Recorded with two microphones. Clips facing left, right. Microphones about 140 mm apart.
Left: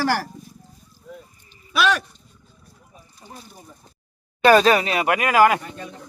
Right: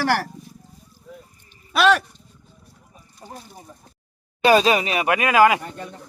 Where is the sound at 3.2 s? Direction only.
45° right (ahead or behind).